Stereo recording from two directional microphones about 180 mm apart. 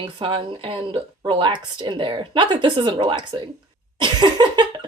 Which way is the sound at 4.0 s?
25° right (ahead or behind).